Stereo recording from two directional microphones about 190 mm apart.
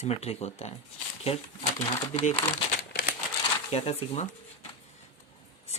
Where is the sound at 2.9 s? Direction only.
50° left (ahead or behind).